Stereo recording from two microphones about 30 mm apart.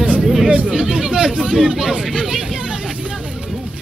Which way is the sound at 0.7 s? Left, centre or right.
Centre.